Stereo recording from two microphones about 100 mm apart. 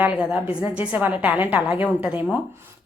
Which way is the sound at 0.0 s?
15° right (ahead or behind).